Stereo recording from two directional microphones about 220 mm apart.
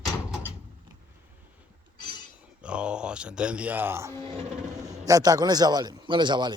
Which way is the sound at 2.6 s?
5° right (ahead or behind).